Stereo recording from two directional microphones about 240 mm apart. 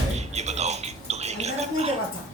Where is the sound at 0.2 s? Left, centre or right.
Right.